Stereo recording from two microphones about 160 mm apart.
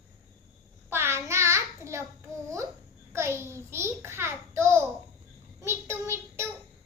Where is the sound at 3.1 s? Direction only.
15° right (ahead or behind).